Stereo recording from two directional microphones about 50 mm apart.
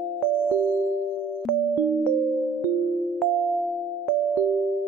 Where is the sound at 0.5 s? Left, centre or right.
Right.